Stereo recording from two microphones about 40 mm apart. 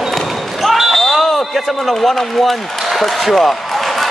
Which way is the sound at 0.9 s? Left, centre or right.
Centre.